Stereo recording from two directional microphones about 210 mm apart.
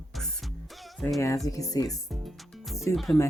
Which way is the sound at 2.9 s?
Centre (ahead or behind).